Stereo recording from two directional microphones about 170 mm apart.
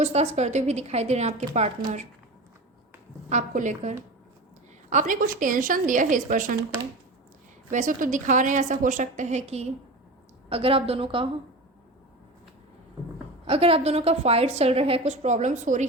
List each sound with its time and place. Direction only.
0.0 s a woman's voice: 40° right (ahead or behind)
3.2 s a woman's voice: 45° right (ahead or behind)
7.7 s a woman's voice: 50° right (ahead or behind); by 11.3 s 30° right (ahead or behind)
13.5 s a woman's voice: 35° right (ahead or behind)